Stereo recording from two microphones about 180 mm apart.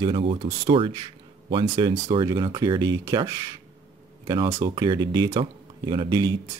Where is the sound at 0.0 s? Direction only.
30° right (ahead or behind).